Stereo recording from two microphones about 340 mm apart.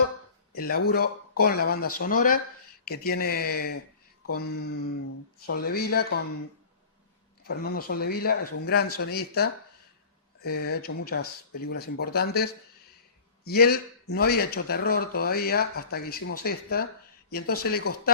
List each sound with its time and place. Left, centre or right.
0.5 s speech: left
7.4 s speech: left